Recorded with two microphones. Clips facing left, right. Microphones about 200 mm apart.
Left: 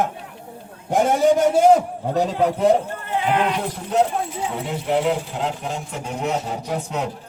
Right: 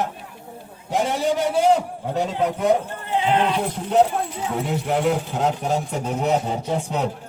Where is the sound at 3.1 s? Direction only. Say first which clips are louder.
Right 2 dB; 20° right (ahead or behind).